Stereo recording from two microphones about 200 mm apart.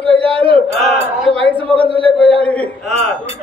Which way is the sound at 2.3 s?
5° left (ahead or behind).